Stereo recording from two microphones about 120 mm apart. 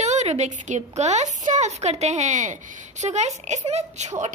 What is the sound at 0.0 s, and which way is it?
A woman's voice, 75° right (ahead or behind).